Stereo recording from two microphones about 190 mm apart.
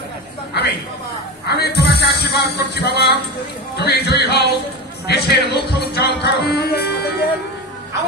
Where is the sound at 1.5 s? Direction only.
60° left (ahead or behind).